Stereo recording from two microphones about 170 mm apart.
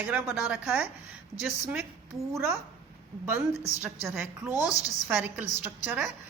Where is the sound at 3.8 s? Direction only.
15° right (ahead or behind).